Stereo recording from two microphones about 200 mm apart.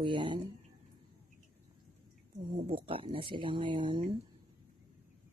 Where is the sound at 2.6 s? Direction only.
25° right (ahead or behind).